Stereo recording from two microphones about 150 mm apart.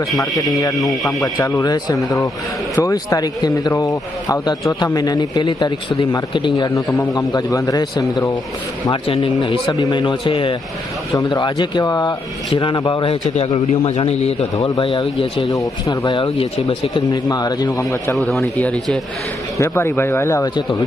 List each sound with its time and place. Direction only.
0.2 s speech: 25° left (ahead or behind)
6.8 s speech: 10° left (ahead or behind)
7.1 s speech: 25° left (ahead or behind)
13.2 s a man's voice: 45° left (ahead or behind)
15.5 s speech: 25° left (ahead or behind)
18.2 s a man's voice: 5° left (ahead or behind)
19.5 s speech: 15° left (ahead or behind)